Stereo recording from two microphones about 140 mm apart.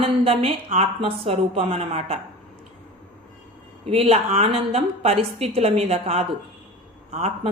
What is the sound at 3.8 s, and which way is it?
Speech, 45° right (ahead or behind).